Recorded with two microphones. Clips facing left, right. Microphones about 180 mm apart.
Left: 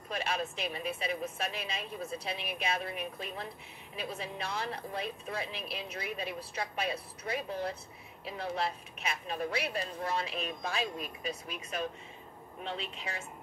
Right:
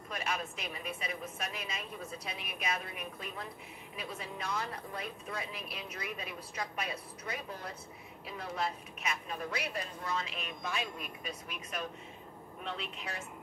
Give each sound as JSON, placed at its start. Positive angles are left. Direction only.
{"t": 0.1, "sound": "speech", "side_deg": 30}
{"t": 12.7, "sound": "speech", "side_deg": 25}